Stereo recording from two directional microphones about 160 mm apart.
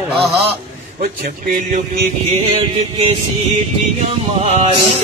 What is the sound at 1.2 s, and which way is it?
Mantra, 55° right (ahead or behind).